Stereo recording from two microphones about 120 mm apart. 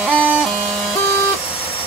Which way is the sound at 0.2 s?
10° right (ahead or behind).